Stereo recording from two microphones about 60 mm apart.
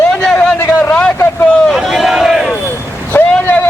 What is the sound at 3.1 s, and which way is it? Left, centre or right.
Vehicle, left.